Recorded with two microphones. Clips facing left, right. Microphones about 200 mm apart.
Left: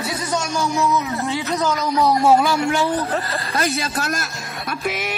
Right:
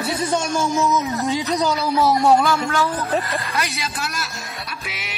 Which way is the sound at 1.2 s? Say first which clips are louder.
Right 1 dB; 15° right (ahead or behind).